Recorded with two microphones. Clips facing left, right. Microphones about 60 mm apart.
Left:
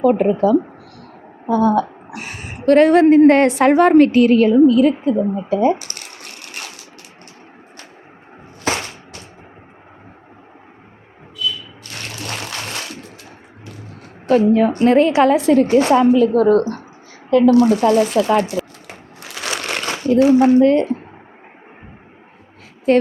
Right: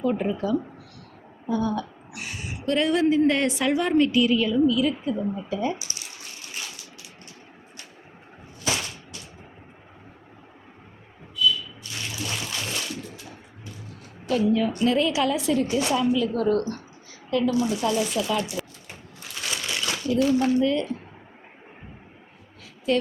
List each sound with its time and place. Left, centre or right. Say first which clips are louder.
0.0 s a woman's voice: left 11 dB; left
5.1 s speech: left 9 dB; left
5.5 s a woman's voice: left 13 dB; left
5.8 s a sound: left 5 dB; left
8.6 s a sound: left 7 dB; left
11.8 s water: left 3 dB; left
13.7 s a woman's voice: left 6 dB; left
17.5 s a woman's voice: left 11 dB; left
18.9 s crushing: left 6 dB; left
19.8 s speech: left 9 dB; left
22.9 s a woman's voice: left 9 dB; left